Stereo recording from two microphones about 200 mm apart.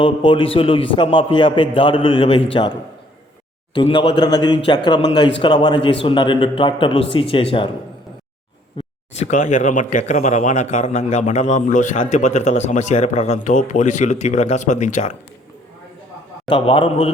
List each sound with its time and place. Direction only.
0.0 s a man's voice: 25° left (ahead or behind)
3.8 s a man's voice: 25° left (ahead or behind)
9.1 s speech: 35° left (ahead or behind)
16.5 s a man's voice: 25° left (ahead or behind)